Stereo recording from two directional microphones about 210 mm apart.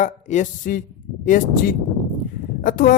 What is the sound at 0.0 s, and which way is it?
A man's voice, 35° left (ahead or behind).